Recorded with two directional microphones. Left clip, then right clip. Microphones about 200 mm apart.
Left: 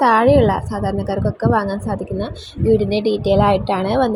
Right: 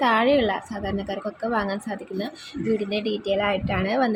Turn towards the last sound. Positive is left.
turn(degrees=15)  # may be behind; listen again after turning